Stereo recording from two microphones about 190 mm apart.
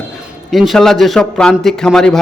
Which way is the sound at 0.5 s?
Centre (ahead or behind).